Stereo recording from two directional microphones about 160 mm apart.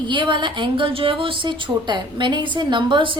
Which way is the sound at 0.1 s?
30° right (ahead or behind).